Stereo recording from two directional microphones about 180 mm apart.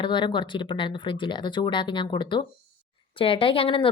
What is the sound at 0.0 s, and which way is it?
A woman's voice, 25° left (ahead or behind).